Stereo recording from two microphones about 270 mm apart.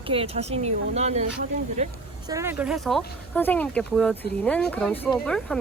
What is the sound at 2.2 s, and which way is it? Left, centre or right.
Speech, centre.